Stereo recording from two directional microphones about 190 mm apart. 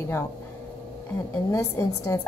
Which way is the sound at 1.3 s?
15° left (ahead or behind).